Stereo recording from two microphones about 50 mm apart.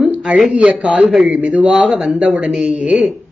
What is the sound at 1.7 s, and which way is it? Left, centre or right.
A woman's voice, centre.